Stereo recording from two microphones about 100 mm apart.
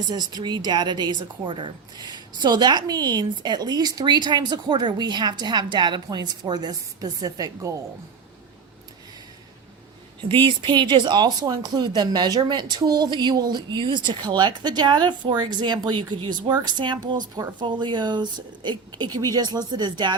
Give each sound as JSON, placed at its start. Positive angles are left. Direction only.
{"t": 0.1, "sound": "speech", "side_deg": -45}
{"t": 10.2, "sound": "speech", "side_deg": -55}